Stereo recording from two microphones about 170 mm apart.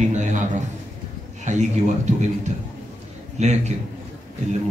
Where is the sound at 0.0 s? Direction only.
45° right (ahead or behind).